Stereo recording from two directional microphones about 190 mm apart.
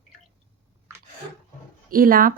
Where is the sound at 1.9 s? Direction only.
50° right (ahead or behind).